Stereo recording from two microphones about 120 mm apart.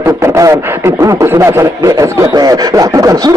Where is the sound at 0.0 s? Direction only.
25° right (ahead or behind).